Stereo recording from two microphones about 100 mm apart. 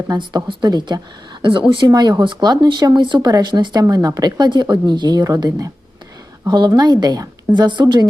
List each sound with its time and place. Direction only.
0.1 s speech: 45° right (ahead or behind)
1.9 s speech: 45° right (ahead or behind)